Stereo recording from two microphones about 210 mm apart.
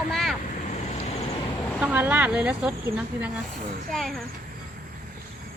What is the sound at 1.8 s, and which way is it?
A child's voice, 5° right (ahead or behind).